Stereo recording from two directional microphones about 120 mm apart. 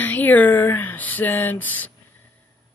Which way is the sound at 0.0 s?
15° left (ahead or behind).